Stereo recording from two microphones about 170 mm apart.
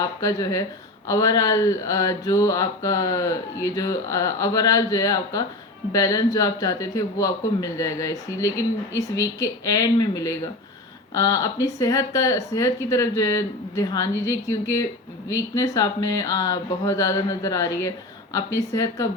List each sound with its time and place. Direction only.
0.0 s mantra: 20° left (ahead or behind)